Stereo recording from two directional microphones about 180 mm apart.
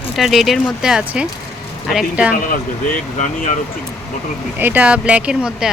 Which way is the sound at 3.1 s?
45° left (ahead or behind).